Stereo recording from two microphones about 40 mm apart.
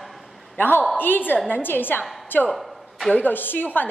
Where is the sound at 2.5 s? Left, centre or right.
Centre.